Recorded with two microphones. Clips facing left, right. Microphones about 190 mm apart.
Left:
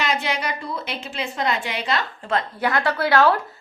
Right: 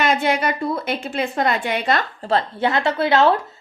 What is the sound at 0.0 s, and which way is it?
A woman's voice, 55° right (ahead or behind).